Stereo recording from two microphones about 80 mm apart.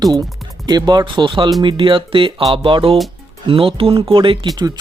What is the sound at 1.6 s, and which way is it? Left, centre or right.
Music, right.